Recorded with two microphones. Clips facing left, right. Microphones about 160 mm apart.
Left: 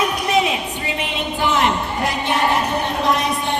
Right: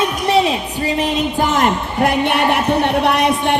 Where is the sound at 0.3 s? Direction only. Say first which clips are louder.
Right 6 dB; 30° right (ahead or behind).